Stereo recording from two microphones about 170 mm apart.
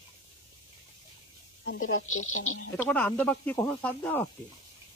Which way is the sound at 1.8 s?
50° left (ahead or behind).